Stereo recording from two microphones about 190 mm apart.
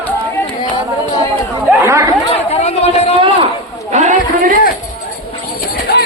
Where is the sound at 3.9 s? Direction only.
40° right (ahead or behind).